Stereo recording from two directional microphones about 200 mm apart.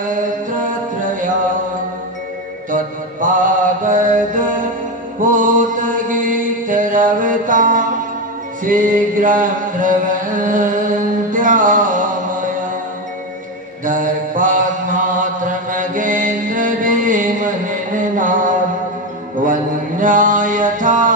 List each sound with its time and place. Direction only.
0.0 s music: 40° right (ahead or behind)
2.7 s mantra: 40° right (ahead or behind)
8.6 s chant: 40° right (ahead or behind)
13.8 s mantra: 40° right (ahead or behind)